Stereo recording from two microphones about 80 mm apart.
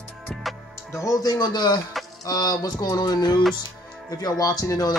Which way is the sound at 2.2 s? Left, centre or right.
Left.